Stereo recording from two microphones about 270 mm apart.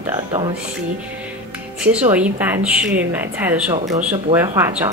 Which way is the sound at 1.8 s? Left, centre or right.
Centre.